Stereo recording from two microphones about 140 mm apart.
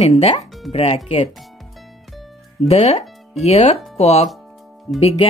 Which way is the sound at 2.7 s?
50° left (ahead or behind).